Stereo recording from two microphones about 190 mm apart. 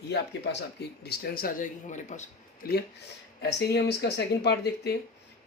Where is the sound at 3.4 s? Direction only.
60° left (ahead or behind).